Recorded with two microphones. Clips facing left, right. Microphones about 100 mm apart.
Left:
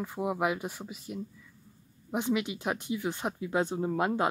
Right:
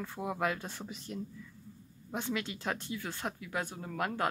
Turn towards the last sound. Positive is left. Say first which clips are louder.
# left 7 dB
turn(degrees=20)  # may be behind; listen again after turning